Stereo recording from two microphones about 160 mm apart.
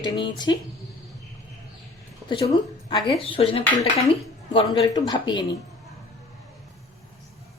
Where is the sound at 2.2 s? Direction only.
35° left (ahead or behind).